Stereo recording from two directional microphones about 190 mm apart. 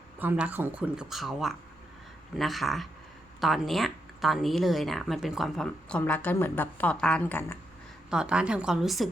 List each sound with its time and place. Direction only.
0.2 s speech: 10° right (ahead or behind); by 7.6 s 10° left (ahead or behind)
8.1 s speech: 5° right (ahead or behind)